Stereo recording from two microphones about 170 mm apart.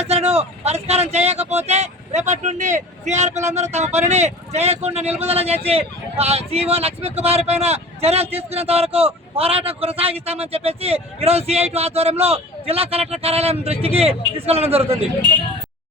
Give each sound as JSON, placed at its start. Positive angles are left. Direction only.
{"t": 0.1, "sound": "speech", "side_deg": -40}